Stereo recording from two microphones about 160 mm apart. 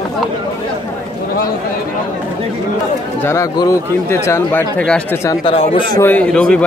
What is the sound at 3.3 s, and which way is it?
Speech, 20° left (ahead or behind).